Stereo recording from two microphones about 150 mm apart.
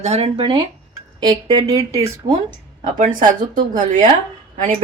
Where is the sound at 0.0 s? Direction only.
45° right (ahead or behind); by 2.3 s 20° right (ahead or behind).